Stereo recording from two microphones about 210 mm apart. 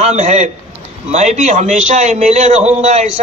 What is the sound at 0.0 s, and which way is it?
A man's voice, 35° right (ahead or behind).